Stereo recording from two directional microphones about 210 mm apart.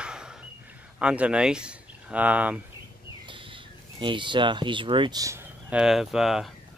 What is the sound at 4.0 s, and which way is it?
Speech, 20° right (ahead or behind).